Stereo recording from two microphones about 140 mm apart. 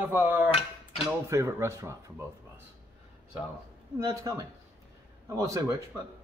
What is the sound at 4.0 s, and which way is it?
A man's voice, 20° right (ahead or behind).